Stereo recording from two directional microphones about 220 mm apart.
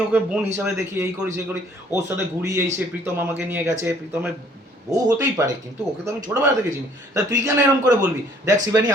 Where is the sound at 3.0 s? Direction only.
10° right (ahead or behind).